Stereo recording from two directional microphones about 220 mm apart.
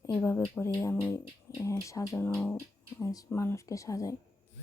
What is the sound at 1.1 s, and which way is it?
Speech, 15° left (ahead or behind).